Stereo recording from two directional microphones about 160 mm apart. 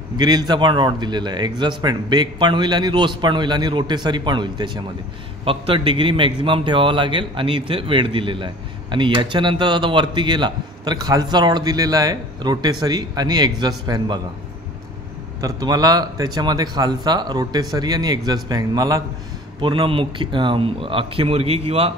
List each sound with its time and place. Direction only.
0.2 s a man's voice: 25° right (ahead or behind)
15.4 s a man's voice: 25° right (ahead or behind)
19.6 s a man's voice: 35° right (ahead or behind)